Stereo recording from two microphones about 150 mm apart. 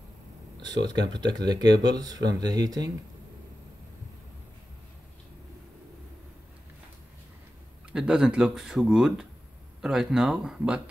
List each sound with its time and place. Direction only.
1.1 s speech: 30° right (ahead or behind)
7.9 s speech: 5° right (ahead or behind)